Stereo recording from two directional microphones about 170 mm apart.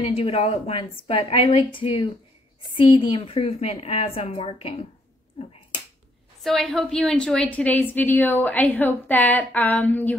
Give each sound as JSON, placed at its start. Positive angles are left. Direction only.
{"t": 0.0, "sound": "a woman's voice", "side_deg": 30}
{"t": 6.4, "sound": "a woman's voice", "side_deg": 0}